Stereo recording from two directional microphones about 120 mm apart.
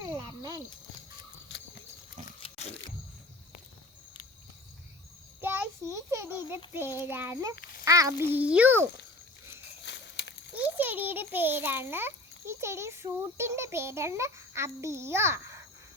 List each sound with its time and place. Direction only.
0.0 s a sound: 30° right (ahead or behind)
2.4 s biting: 60° left (ahead or behind)
5.4 s child singing: 15° right (ahead or behind)
7.0 s a child's voice: 20° right (ahead or behind)
8.4 s speech: 10° right (ahead or behind)
10.5 s a child's voice: 15° right (ahead or behind)